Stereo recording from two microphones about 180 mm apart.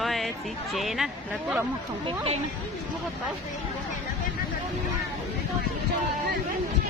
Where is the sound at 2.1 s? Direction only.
35° right (ahead or behind).